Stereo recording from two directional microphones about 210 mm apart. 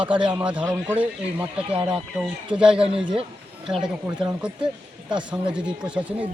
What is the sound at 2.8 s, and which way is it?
Speech, 25° right (ahead or behind).